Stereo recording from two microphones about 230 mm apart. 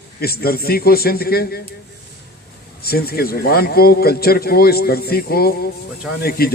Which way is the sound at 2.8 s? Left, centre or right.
Left.